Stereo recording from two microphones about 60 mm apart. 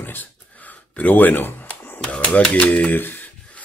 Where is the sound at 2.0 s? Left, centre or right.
Centre.